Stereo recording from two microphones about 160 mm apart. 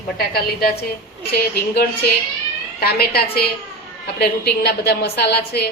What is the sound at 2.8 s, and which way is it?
Speech, 75° left (ahead or behind).